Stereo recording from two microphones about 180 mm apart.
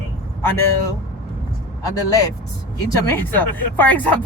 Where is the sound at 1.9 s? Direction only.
20° left (ahead or behind).